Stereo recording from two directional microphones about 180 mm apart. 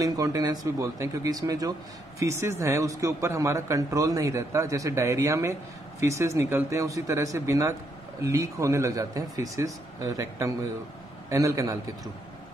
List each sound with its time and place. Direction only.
0.0 s a man's voice: 20° right (ahead or behind)